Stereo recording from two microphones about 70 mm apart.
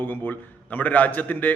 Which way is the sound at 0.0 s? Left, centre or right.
Left.